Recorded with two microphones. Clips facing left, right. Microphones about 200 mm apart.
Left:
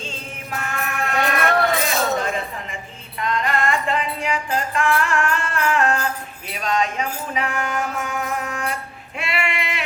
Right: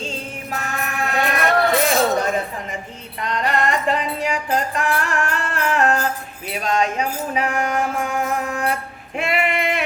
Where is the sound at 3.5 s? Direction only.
40° right (ahead or behind).